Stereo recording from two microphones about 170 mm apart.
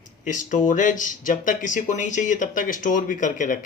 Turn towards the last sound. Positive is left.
turn(degrees=50)  # may be behind; listen again after turning